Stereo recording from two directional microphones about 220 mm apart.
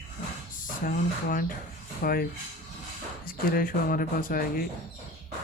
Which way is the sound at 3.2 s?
40° left (ahead or behind).